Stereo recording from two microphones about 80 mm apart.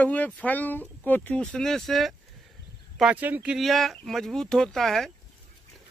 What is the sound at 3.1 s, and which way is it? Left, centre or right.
Speech, right.